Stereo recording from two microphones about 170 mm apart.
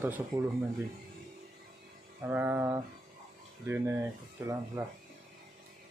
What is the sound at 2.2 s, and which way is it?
Speech, 10° right (ahead or behind).